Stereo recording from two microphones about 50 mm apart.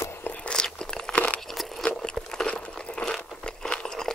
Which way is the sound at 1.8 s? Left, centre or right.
Centre.